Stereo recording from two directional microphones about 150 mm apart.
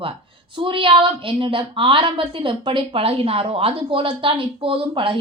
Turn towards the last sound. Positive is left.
turn(degrees=-35)  # may be behind; listen again after turning